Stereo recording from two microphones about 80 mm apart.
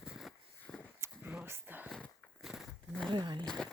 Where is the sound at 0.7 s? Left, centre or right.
Centre.